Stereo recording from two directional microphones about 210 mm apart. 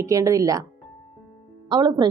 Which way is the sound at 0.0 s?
15° right (ahead or behind).